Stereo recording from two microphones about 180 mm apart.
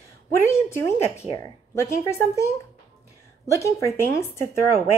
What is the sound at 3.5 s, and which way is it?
Speech, 15° left (ahead or behind).